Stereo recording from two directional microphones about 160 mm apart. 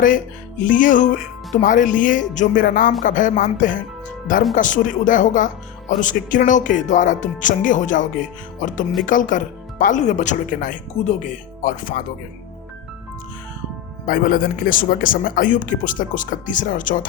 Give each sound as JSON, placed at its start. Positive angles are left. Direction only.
{"t": 0.6, "sound": "speech", "side_deg": 55}
{"t": 14.1, "sound": "speech", "side_deg": 65}